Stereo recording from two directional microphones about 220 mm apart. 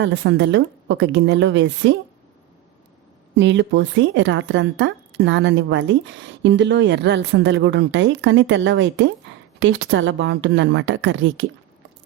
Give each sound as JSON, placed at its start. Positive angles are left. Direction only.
{"t": 0.0, "sound": "speech", "side_deg": -55}
{"t": 3.3, "sound": "speech", "side_deg": -55}